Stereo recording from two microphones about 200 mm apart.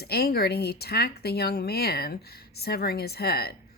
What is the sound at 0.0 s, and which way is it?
Speech, 50° left (ahead or behind).